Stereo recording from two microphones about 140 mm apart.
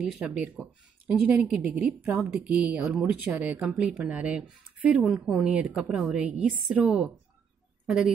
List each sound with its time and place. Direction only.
0.0 s a woman's voice: 10° right (ahead or behind)